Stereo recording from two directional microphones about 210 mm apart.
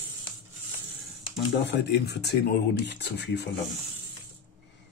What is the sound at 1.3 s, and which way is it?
Speech, 55° left (ahead or behind).